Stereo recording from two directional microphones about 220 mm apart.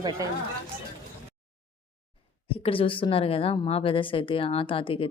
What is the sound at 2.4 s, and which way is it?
A woman's voice, 25° left (ahead or behind).